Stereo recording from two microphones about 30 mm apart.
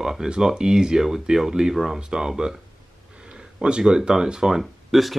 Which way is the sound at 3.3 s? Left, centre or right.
Right.